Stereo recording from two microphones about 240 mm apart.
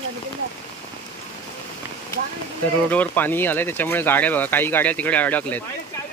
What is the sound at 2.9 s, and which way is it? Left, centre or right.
Speech, centre.